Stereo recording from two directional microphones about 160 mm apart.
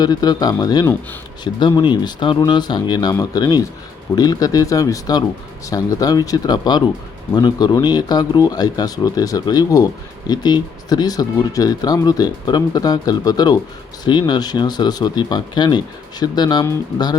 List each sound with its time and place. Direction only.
0.0 s speech: 25° left (ahead or behind)